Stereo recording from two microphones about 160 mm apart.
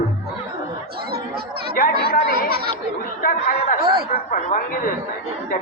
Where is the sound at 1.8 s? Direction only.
60° left (ahead or behind).